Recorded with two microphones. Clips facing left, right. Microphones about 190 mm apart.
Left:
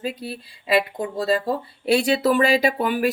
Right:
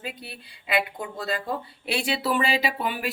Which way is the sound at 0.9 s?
35° left (ahead or behind).